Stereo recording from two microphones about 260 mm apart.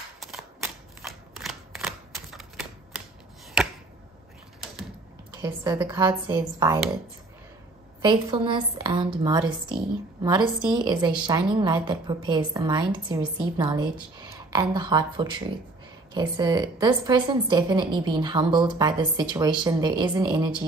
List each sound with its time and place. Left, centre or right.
0.2 s a sound: centre
1.0 s typewriter: centre
5.4 s a woman's voice: centre
8.0 s a woman's voice: centre
13.8 s a sound: centre
14.5 s a woman's voice: centre